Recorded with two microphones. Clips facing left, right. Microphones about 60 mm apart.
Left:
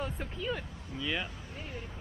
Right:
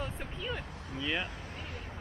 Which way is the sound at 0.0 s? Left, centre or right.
Centre.